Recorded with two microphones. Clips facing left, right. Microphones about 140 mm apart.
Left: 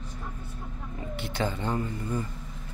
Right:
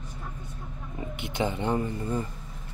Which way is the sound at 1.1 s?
20° right (ahead or behind).